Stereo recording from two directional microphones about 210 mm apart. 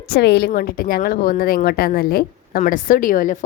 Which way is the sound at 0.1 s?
50° left (ahead or behind).